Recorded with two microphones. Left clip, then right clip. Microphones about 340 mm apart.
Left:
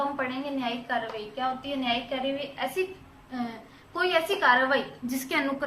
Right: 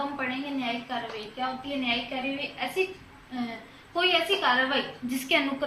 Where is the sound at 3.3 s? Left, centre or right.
Centre.